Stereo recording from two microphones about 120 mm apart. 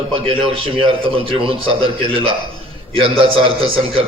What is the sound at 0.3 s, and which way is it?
A man's voice, 50° right (ahead or behind).